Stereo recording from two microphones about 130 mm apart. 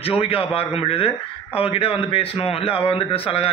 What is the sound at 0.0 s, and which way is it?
A man's voice, 45° left (ahead or behind).